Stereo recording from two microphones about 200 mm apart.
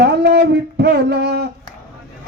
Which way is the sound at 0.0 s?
55° right (ahead or behind).